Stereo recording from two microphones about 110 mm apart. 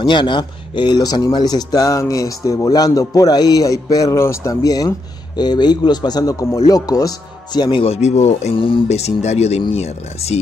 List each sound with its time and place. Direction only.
0.0 s a man's voice: 45° left (ahead or behind)
7.8 s speech: 80° left
8.5 s speech: 50° left (ahead or behind)
8.8 s speech: 75° left (ahead or behind)
9.8 s speech: 70° left (ahead or behind)